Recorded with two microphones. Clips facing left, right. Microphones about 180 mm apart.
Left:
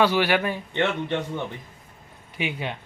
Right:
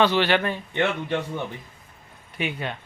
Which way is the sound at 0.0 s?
10° left (ahead or behind).